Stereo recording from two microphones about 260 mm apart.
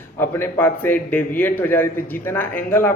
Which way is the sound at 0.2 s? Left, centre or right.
Centre.